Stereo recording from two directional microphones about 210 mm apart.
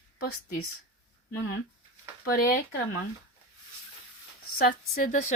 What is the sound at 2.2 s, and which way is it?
Speech, 45° left (ahead or behind).